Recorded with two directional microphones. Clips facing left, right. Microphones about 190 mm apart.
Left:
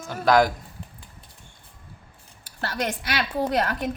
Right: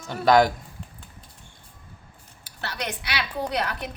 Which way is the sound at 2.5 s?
45° left (ahead or behind).